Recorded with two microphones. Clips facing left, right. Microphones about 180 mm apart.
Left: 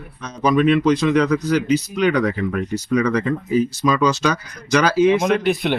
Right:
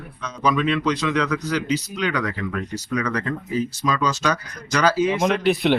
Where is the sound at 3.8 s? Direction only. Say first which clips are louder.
Left 5 dB; 70° left (ahead or behind).